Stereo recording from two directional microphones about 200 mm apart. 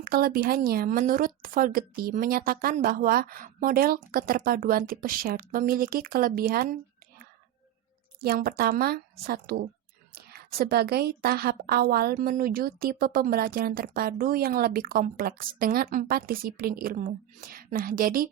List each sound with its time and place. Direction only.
0.0 s a woman's voice: 50° right (ahead or behind)
8.2 s a woman's voice: 50° right (ahead or behind)